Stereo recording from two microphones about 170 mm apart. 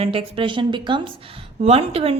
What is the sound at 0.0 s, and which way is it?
A woman's voice, 35° right (ahead or behind).